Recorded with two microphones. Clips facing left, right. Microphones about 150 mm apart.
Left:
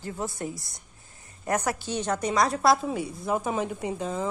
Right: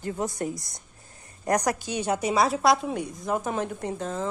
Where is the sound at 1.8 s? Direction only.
10° right (ahead or behind).